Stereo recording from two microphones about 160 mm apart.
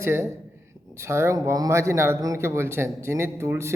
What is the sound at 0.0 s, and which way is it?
A man's voice, 15° right (ahead or behind).